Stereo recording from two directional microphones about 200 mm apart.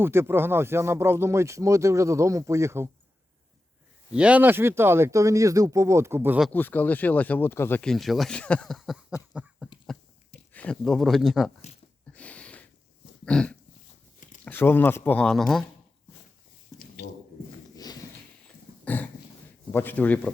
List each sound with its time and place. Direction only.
0.0 s speech: 10° right (ahead or behind)
4.1 s speech: 5° right (ahead or behind)
6.5 s speech: 10° left (ahead or behind)
9.3 s a sound: 5° right (ahead or behind)
10.5 s speech: 5° left (ahead or behind)
12.1 s a sound: 5° left (ahead or behind)
13.2 s dog: 5° left (ahead or behind)
14.4 s speech: 10° left (ahead or behind)
17.7 s a sound: 20° left (ahead or behind)
18.9 s dog: 10° left (ahead or behind)
19.7 s speech: 10° left (ahead or behind)